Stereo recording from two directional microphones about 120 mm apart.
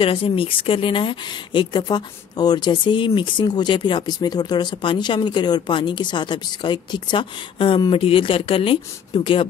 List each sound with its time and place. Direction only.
0.0 s speech: 50° left (ahead or behind)